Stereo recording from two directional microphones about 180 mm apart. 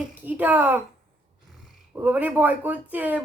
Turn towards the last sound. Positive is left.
turn(degrees=-10)  # may be behind; listen again after turning